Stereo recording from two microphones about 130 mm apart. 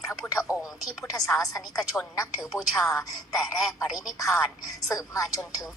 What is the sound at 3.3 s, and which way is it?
Speech, centre (ahead or behind).